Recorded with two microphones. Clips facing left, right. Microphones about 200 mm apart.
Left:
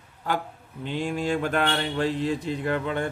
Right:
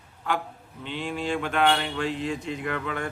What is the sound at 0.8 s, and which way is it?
Speech, 45° left (ahead or behind).